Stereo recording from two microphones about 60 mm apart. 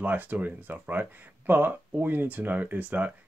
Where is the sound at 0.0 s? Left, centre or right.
Right.